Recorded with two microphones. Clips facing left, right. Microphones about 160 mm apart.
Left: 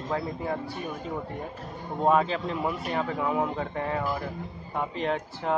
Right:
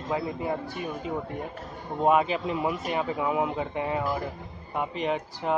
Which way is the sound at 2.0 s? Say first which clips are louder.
Right 1 dB; 10° right (ahead or behind).